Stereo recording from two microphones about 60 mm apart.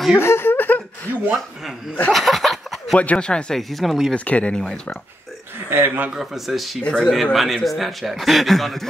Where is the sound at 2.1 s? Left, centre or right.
Centre.